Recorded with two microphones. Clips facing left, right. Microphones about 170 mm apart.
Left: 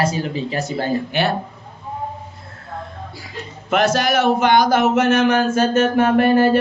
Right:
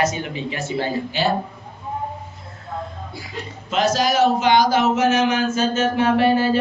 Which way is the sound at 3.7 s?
60° left (ahead or behind).